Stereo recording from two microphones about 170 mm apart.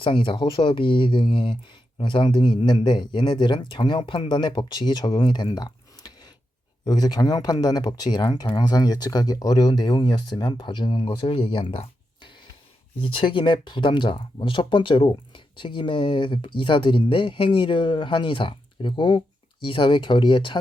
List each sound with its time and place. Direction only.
0.0 s speech: 30° left (ahead or behind)